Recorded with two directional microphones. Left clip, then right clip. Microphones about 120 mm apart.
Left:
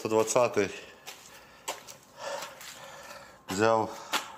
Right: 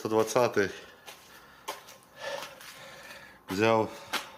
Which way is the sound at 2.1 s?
30° right (ahead or behind).